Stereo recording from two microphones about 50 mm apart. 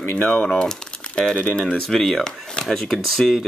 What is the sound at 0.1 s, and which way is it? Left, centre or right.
Speech, left.